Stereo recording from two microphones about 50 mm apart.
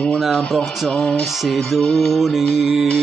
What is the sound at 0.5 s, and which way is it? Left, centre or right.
Music, centre.